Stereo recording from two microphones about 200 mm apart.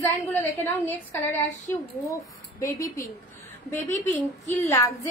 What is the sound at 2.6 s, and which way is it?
A woman's voice, 15° left (ahead or behind).